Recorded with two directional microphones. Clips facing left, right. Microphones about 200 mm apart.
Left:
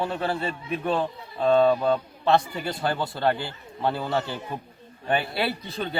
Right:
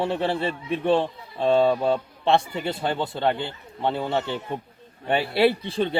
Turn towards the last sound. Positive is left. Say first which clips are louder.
# right 8 dB
turn(degrees=-30)  # may be behind; listen again after turning